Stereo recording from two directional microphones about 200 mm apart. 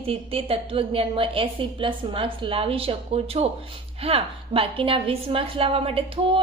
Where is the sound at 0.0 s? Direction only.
30° right (ahead or behind).